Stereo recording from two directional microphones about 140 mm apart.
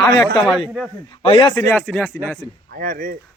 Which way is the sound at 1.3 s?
40° left (ahead or behind).